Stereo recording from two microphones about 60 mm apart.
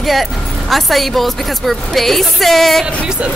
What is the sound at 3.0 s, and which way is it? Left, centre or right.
Speech, centre.